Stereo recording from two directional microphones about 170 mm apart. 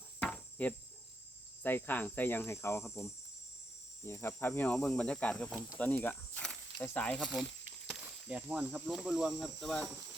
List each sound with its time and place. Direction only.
0.2 s cricket: 10° left (ahead or behind)
1.6 s speech: 10° left (ahead or behind)
7.9 s speech: 5° right (ahead or behind)